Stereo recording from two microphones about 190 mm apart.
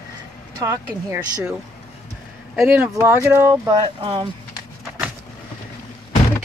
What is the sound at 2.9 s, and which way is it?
Speech, 10° right (ahead or behind).